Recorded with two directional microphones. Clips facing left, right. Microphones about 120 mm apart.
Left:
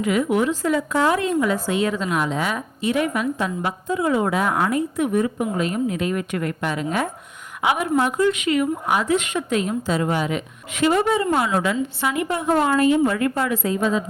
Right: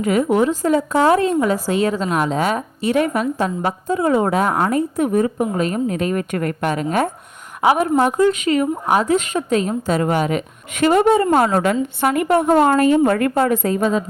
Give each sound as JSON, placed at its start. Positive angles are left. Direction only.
{"t": 0.0, "sound": "a woman's voice", "side_deg": -40}
{"t": 7.6, "sound": "a woman's voice", "side_deg": -35}
{"t": 9.9, "sound": "a woman's voice", "side_deg": -55}